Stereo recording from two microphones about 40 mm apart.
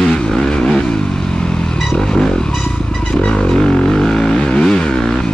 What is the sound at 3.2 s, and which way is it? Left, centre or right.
Vehicle, centre.